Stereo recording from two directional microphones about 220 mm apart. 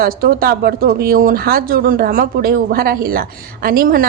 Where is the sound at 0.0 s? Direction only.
40° right (ahead or behind).